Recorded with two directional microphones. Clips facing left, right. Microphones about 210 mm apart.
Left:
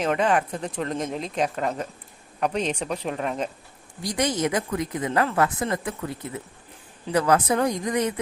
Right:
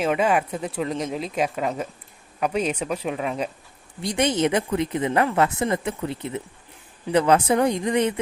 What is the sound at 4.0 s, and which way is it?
Speech, 25° right (ahead or behind).